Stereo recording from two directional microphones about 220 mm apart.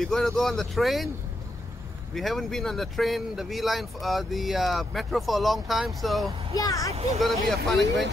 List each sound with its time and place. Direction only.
0.0 s speech: centre (ahead or behind)
2.1 s speech: centre (ahead or behind)
6.5 s speech: 15° left (ahead or behind)
6.9 s speech: 30° right (ahead or behind)
7.2 s speech: centre (ahead or behind)